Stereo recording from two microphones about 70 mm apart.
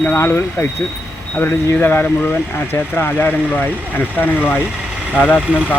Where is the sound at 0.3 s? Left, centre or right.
Left.